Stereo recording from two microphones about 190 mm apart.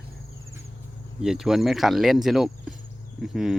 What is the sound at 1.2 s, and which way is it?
Cricket, centre (ahead or behind).